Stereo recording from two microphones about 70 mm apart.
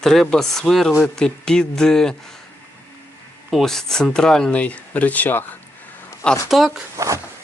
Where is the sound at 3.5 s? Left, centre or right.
Centre; by 5.4 s left.